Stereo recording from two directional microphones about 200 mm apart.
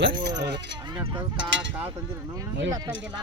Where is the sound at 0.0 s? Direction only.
55° right (ahead or behind).